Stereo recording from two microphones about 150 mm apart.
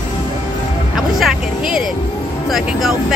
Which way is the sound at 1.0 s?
Centre (ahead or behind).